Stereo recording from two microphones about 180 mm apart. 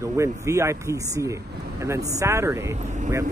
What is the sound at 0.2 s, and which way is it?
Speech, 15° right (ahead or behind).